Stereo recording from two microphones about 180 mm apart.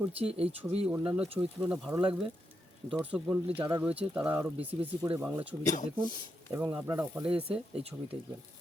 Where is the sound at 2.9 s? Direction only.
5° right (ahead or behind).